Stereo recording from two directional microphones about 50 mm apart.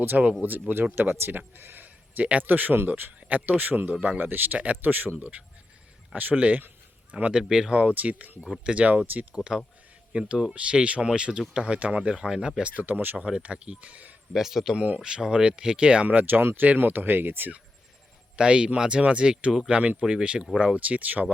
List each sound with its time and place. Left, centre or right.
0.1 s speech: right
0.7 s speech: right
7.4 s speech: centre
7.7 s speech: right
12.7 s speech: right
13.1 s speech: centre
14.3 s speech: centre
14.8 s speech: right
18.3 s speech: centre
20.2 s speech: right